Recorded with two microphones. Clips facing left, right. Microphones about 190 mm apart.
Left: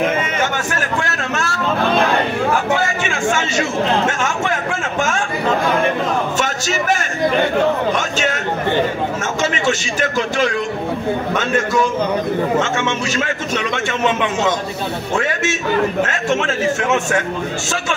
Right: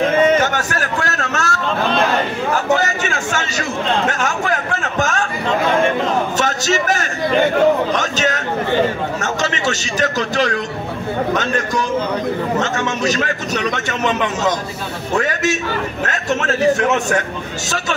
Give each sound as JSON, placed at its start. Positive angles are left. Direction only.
{"t": 0.4, "sound": "a sound", "side_deg": -40}
{"t": 2.7, "sound": "a man's voice", "side_deg": -40}
{"t": 6.4, "sound": "a man's voice", "side_deg": -40}
{"t": 12.7, "sound": "a man's voice", "side_deg": -40}